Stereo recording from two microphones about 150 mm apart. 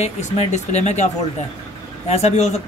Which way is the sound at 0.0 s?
50° left (ahead or behind).